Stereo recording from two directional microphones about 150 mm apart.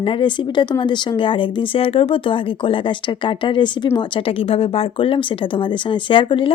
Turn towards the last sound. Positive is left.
turn(degrees=35)  # may be behind; listen again after turning